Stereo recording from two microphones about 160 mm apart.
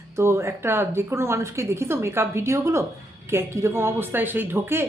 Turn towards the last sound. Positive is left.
turn(degrees=-15)  # may be behind; listen again after turning